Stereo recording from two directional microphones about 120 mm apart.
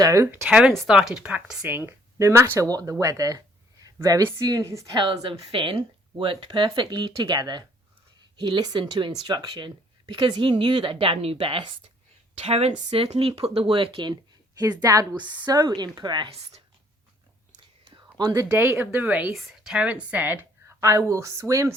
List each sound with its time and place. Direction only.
0.0 s a woman's voice: 25° right (ahead or behind)
0.7 s a woman's voice: centre (ahead or behind); by 4.9 s 25° right (ahead or behind)
4.9 s a woman's voice: 45° right (ahead or behind)
12.4 s speech: 60° right (ahead or behind); by 14.2 s 45° right (ahead or behind)
14.6 s speech: 35° right (ahead or behind)
16.3 s speech: 55° right (ahead or behind)
18.2 s a woman's voice: 30° right (ahead or behind); by 19.3 s 15° right (ahead or behind)
19.3 s a woman's voice: 5° right (ahead or behind); by 21.8 s 25° right (ahead or behind)